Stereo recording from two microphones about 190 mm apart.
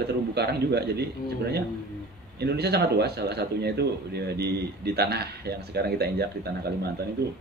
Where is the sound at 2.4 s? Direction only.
60° right (ahead or behind).